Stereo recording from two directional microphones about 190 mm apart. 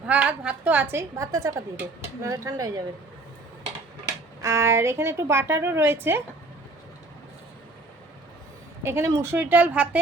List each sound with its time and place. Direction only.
0.0 s speech: 5° right (ahead or behind)
4.4 s speech: 15° right (ahead or behind)
8.8 s speech: 15° right (ahead or behind)